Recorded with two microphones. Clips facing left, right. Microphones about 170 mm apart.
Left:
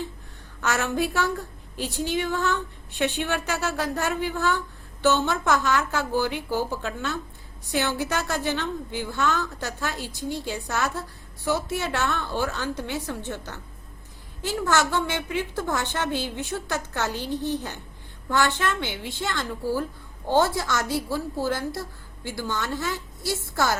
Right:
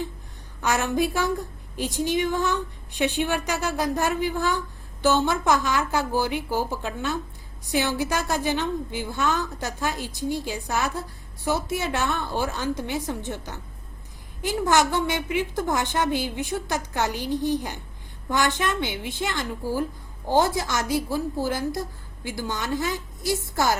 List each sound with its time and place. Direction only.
0.6 s a woman's voice: 15° right (ahead or behind)